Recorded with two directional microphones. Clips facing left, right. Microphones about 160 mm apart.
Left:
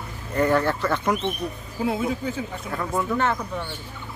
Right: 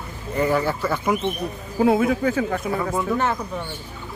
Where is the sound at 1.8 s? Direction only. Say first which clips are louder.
Right 7 dB; 65° right (ahead or behind); by 2.6 s 90° right.